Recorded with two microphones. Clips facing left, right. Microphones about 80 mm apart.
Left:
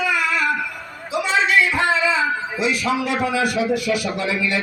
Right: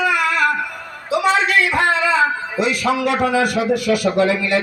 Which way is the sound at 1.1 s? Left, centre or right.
Right.